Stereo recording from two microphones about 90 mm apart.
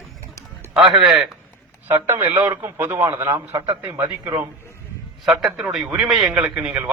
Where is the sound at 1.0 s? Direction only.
5° right (ahead or behind).